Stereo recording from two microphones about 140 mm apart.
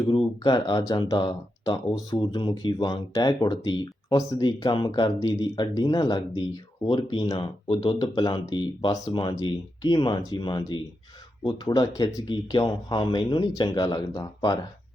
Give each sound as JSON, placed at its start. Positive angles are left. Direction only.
{"t": 0.4, "sound": "speech", "side_deg": 30}